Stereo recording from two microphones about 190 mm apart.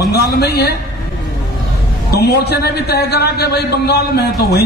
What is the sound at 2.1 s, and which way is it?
A man's voice, 60° left (ahead or behind).